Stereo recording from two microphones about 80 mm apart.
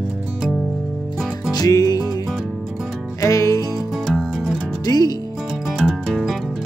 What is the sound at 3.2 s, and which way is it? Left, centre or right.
Music, left.